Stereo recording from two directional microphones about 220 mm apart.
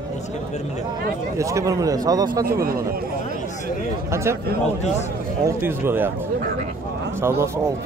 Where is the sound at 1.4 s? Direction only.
15° right (ahead or behind).